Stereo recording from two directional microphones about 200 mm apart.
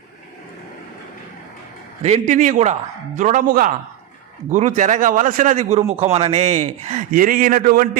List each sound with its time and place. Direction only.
2.0 s a man's voice: 30° right (ahead or behind)